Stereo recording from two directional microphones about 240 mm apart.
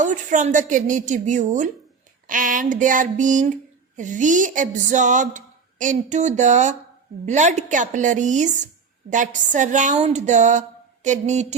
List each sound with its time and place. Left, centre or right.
0.0 s a woman's voice: right